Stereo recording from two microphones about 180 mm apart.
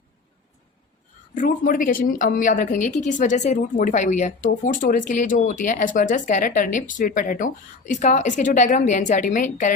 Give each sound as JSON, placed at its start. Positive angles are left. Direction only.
{"t": 1.4, "sound": "speech", "side_deg": 50}